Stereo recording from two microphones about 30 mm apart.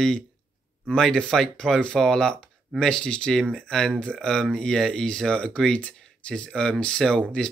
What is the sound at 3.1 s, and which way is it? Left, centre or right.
Speech, left.